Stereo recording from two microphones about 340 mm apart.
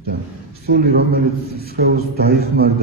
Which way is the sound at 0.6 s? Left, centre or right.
Right.